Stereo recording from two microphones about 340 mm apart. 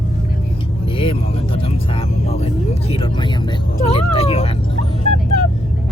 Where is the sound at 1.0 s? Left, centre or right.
Centre.